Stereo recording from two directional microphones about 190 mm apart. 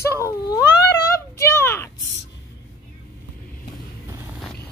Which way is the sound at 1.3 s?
15° left (ahead or behind).